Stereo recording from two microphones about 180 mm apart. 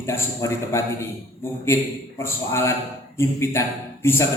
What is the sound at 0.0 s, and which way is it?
Speech, 15° left (ahead or behind).